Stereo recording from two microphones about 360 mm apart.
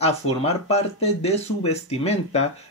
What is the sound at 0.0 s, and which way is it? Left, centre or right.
Speech, centre.